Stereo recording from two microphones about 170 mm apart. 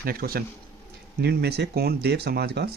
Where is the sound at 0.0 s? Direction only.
60° right (ahead or behind).